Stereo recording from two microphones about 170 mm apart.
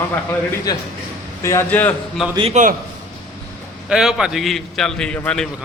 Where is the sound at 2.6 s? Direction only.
45° right (ahead or behind).